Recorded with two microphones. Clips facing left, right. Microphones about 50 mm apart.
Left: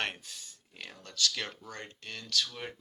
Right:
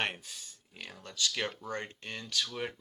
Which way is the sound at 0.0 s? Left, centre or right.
Centre.